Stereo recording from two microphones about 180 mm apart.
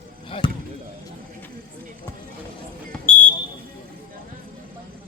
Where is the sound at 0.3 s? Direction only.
30° left (ahead or behind).